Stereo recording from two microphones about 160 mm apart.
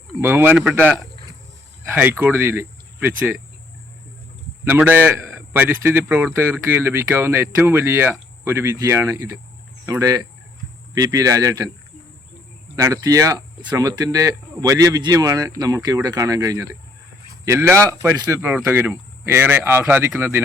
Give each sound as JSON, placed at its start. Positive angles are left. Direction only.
{"t": 0.2, "sound": "speech", "side_deg": -15}
{"t": 4.6, "sound": "speech", "side_deg": -10}
{"t": 12.7, "sound": "speech", "side_deg": -20}